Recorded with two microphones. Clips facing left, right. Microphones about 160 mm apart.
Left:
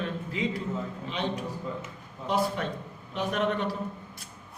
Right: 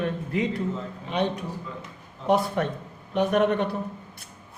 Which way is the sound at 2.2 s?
55° right (ahead or behind).